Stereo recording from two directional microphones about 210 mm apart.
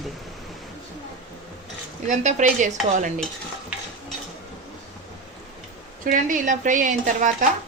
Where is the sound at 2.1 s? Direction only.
35° right (ahead or behind).